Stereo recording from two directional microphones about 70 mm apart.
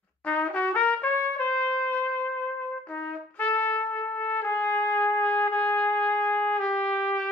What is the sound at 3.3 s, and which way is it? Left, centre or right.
Trumpet, left.